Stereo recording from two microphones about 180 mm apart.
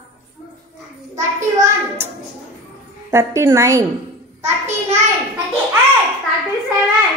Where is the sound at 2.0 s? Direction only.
15° right (ahead or behind).